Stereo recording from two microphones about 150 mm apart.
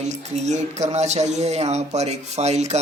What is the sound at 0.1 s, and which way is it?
Speech, 50° right (ahead or behind).